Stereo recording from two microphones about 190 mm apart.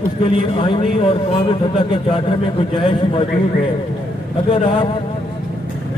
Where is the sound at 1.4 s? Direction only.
25° left (ahead or behind).